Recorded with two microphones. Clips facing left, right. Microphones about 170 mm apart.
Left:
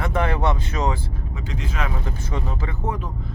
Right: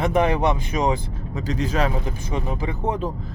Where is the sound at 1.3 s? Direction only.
40° right (ahead or behind).